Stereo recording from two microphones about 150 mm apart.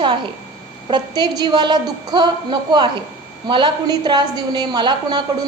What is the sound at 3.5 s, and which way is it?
A woman's voice, 30° right (ahead or behind).